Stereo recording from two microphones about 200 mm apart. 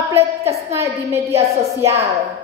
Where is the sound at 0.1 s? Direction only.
15° right (ahead or behind).